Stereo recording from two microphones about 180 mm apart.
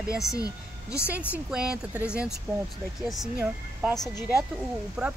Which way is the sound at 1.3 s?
5° right (ahead or behind).